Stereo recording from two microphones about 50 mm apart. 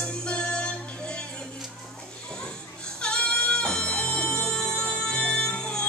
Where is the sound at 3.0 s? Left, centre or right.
Left.